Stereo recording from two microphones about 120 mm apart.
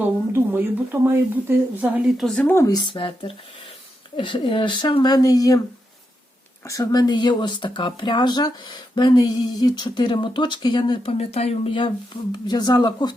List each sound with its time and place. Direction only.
0.3 s speech: 15° right (ahead or behind)
2.2 s speech: 5° left (ahead or behind)
2.5 s speech: 25° left (ahead or behind)
2.7 s speech: 40° left (ahead or behind)
6.7 s speech: 30° left (ahead or behind)
11.2 s speech: 60° left (ahead or behind)
12.5 s speech: 35° left (ahead or behind)